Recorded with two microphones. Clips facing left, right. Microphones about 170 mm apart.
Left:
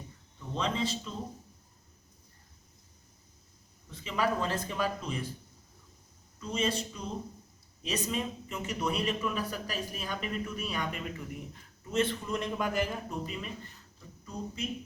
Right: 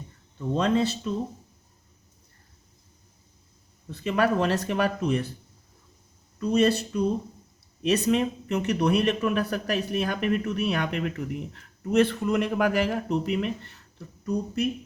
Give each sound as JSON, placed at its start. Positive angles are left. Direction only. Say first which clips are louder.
{"t": 0.5, "sound": "speech", "louder": "right 8 dB", "side_deg": -60}
{"t": 3.9, "sound": "speech", "louder": "right 7 dB", "side_deg": -65}
{"t": 6.4, "sound": "speech", "louder": "right 10 dB", "side_deg": -70}